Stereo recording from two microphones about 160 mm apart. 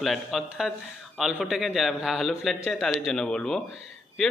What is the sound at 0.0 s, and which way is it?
A man's voice, centre (ahead or behind).